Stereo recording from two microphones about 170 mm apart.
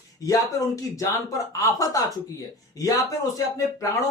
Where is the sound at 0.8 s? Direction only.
20° left (ahead or behind).